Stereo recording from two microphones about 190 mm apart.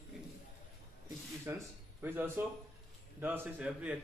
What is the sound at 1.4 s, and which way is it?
Speech, 15° right (ahead or behind).